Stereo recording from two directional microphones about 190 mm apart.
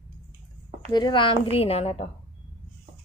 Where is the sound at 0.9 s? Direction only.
25° left (ahead or behind).